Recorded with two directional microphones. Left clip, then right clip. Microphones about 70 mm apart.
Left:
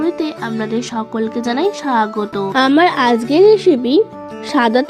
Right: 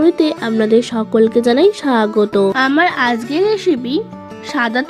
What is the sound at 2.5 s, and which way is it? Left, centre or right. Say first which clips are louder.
Speech: left 1 dB; left.